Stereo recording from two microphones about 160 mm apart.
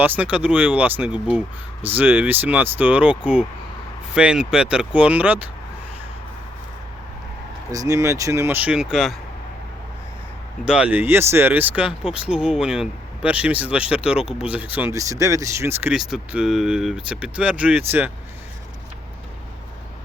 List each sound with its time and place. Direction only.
0.0 s speech: 10° right (ahead or behind)
7.7 s speech: 20° right (ahead or behind); by 9.1 s 5° right (ahead or behind)
10.7 s speech: 10° right (ahead or behind)